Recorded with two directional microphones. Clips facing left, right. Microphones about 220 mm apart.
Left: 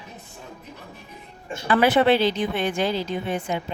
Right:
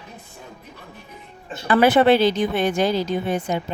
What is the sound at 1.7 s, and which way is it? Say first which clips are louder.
A woman's voice: right 3 dB; 45° right (ahead or behind).